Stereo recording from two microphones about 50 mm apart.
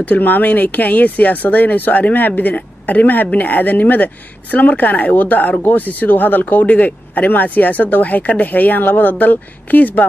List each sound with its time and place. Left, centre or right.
0.0 s speech: left